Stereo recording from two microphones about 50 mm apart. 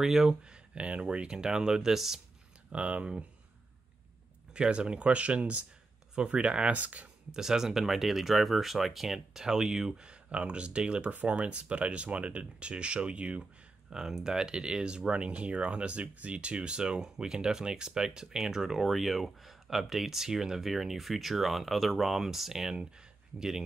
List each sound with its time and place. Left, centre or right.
0.0 s speech: centre
0.4 s speech: right
2.7 s speech: right
4.6 s speech: centre
7.2 s speech: centre
13.4 s speech: centre